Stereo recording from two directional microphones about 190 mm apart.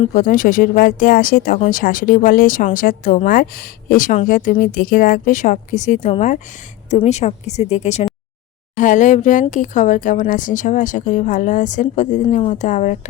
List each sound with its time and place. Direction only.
0.0 s speech: 45° left (ahead or behind)